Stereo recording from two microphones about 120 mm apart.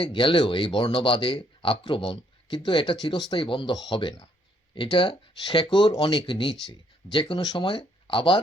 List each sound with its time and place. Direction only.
0.0 s speech: 45° left (ahead or behind)